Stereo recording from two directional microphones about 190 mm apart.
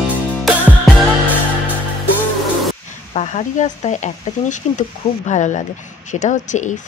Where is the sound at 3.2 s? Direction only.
40° left (ahead or behind).